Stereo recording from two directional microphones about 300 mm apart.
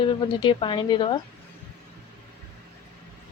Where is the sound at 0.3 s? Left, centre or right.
Centre.